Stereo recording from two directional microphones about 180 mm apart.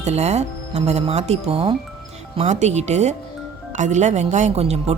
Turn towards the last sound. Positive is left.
turn(degrees=-35)  # may be behind; listen again after turning